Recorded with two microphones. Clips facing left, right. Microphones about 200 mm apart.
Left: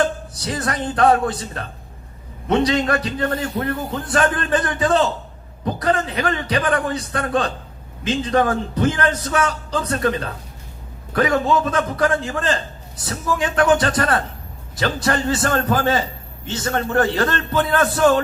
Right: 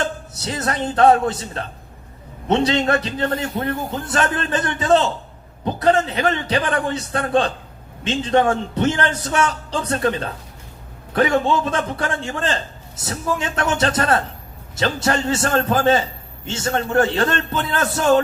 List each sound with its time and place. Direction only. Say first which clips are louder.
0.0 s speech: left 4 dB; 30° right (ahead or behind)
2.5 s a man's voice: even; 30° right (ahead or behind)